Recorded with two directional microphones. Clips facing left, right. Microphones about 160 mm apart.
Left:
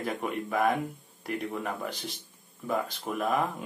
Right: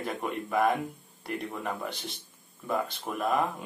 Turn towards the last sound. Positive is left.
turn(degrees=0)  # may be behind; listen again after turning